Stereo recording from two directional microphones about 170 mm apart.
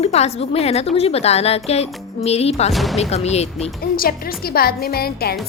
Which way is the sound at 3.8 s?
60° left (ahead or behind).